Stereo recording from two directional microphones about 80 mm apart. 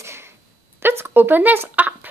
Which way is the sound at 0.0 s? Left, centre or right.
Right.